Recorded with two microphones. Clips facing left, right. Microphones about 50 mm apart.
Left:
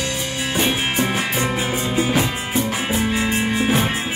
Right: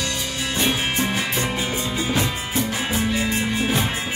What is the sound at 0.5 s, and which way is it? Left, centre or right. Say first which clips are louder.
Music: left 2 dB; left.